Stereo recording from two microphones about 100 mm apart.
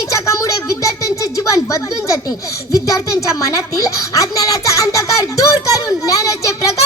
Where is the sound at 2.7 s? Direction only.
35° left (ahead or behind).